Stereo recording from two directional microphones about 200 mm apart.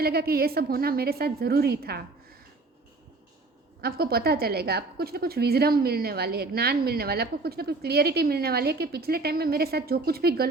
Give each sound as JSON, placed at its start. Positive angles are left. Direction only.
{"t": 0.0, "sound": "a woman's voice", "side_deg": -50}
{"t": 3.8, "sound": "a woman's voice", "side_deg": -50}